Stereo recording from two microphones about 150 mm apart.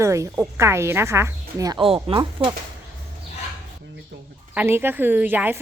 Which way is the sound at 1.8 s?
35° right (ahead or behind).